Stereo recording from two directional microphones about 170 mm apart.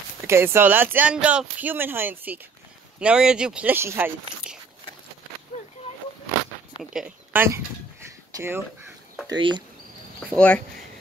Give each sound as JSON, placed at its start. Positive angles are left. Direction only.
{"t": 0.3, "sound": "speech", "side_deg": -15}
{"t": 6.8, "sound": "a sound", "side_deg": -5}
{"t": 8.4, "sound": "speech", "side_deg": -15}
{"t": 9.3, "sound": "speech", "side_deg": -25}
{"t": 10.3, "sound": "speech", "side_deg": 5}